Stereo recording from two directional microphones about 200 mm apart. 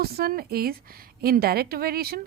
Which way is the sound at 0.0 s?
50° right (ahead or behind).